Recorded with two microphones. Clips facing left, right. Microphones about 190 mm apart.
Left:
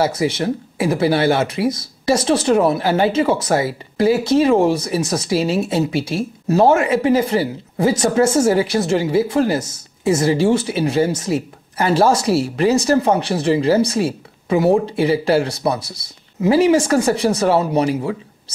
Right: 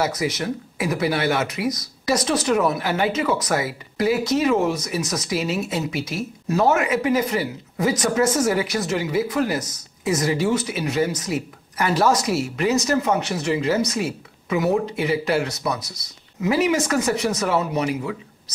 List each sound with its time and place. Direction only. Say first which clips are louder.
0.0 s speech: left 5 dB; 30° left (ahead or behind)